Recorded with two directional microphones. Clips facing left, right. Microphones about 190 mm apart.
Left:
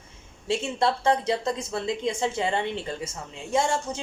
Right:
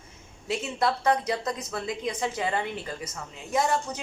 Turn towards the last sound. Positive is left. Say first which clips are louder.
# left 1 dB
turn(degrees=25)  # may be behind; listen again after turning